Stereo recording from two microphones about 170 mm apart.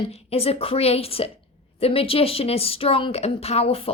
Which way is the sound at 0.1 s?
35° left (ahead or behind).